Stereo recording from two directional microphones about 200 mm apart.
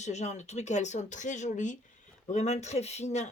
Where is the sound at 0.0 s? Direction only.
35° left (ahead or behind).